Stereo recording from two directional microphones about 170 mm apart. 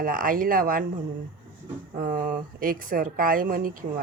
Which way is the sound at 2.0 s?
50° right (ahead or behind).